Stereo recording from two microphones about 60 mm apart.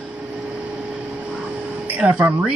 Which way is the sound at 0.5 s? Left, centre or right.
Centre.